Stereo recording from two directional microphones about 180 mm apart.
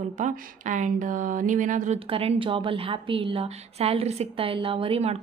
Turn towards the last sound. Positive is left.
turn(degrees=-35)  # may be behind; listen again after turning